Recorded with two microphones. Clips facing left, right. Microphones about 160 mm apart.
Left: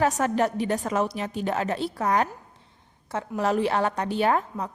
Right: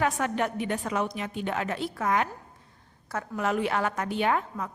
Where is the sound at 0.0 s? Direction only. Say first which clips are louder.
Left 4 dB; 40° left (ahead or behind).